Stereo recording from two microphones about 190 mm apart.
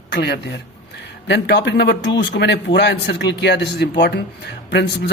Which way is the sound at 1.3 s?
65° left (ahead or behind).